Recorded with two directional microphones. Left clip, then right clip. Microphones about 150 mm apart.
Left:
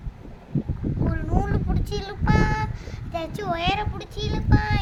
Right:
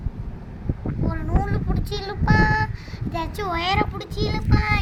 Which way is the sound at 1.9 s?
10° right (ahead or behind).